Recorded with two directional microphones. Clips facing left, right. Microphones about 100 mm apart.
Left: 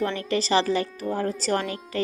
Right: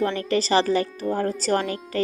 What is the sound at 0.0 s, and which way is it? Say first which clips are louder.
Speech: right 3 dB; 40° right (ahead or behind).